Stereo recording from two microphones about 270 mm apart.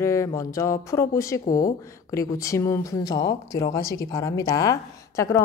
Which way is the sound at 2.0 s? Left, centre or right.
Centre.